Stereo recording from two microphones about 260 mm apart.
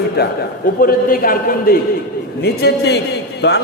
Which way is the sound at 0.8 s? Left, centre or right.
Left.